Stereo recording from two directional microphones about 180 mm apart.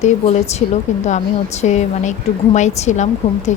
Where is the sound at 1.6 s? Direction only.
40° left (ahead or behind).